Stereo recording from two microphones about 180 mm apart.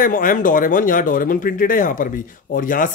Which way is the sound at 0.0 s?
50° left (ahead or behind).